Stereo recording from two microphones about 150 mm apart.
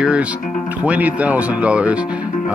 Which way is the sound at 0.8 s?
10° right (ahead or behind).